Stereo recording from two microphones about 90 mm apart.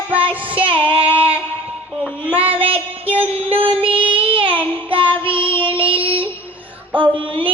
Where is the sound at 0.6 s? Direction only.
75° right (ahead or behind).